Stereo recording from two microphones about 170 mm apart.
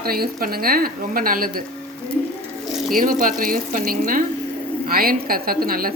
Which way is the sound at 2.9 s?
55° right (ahead or behind).